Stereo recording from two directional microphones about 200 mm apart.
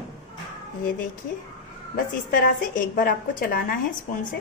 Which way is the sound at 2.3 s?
45° left (ahead or behind).